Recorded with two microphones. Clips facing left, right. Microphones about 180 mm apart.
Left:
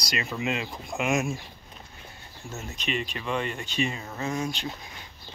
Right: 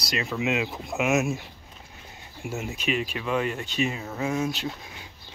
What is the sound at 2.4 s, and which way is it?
Speech, 10° right (ahead or behind).